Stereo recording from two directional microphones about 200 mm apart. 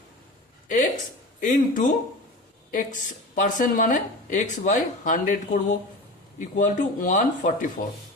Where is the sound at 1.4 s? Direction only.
40° left (ahead or behind).